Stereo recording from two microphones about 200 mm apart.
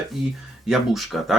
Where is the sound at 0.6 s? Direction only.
Centre (ahead or behind).